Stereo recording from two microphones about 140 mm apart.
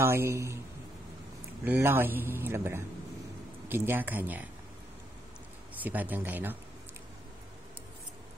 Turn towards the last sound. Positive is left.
turn(degrees=-15)  # may be behind; listen again after turning